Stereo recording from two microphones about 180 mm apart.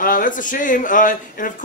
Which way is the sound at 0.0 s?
50° left (ahead or behind).